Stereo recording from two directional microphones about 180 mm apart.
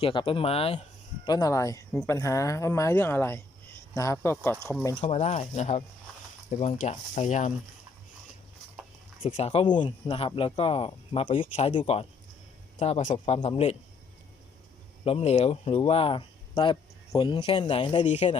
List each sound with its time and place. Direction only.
0.0 s speech: 30° left (ahead or behind)
1.2 s speech: 20° left (ahead or behind)
4.9 s speech: 35° left (ahead or behind)
9.2 s a man's voice: 35° left (ahead or behind)
15.0 s speech: 35° left (ahead or behind)
18.0 s speech: 40° left (ahead or behind)